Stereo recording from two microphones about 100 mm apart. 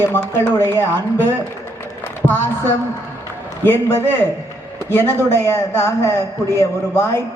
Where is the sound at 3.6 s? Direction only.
25° left (ahead or behind).